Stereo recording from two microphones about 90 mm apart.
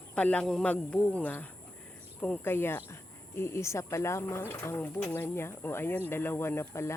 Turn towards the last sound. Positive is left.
turn(degrees=30)  # may be behind; listen again after turning